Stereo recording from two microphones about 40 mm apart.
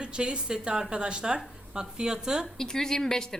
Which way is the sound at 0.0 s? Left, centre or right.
Right.